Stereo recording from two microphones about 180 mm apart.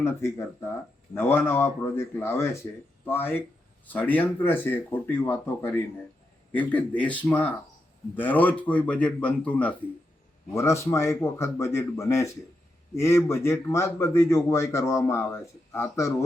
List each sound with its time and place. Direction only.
0.0 s a man's voice: 15° left (ahead or behind)